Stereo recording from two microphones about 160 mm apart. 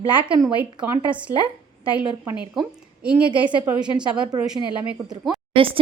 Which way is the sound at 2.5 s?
5° right (ahead or behind).